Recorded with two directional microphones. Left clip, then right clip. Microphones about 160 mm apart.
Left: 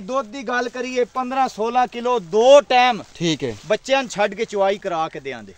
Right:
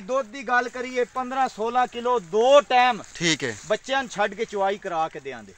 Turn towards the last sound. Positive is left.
turn(degrees=25)  # may be behind; listen again after turning